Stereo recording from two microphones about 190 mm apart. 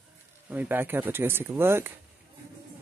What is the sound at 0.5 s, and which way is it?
Speech, 10° right (ahead or behind).